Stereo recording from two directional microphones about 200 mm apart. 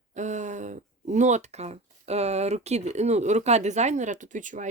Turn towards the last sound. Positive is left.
turn(degrees=-40)  # may be behind; listen again after turning